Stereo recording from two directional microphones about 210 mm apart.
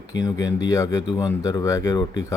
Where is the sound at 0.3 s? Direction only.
15° left (ahead or behind).